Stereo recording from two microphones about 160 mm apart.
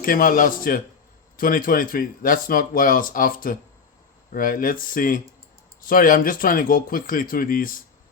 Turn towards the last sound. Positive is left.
turn(degrees=65)  # may be behind; listen again after turning